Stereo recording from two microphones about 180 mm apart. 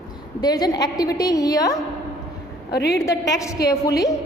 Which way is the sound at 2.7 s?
65° left (ahead or behind).